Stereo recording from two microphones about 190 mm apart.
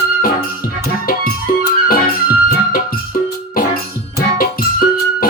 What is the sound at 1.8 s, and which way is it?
Music, 50° left (ahead or behind).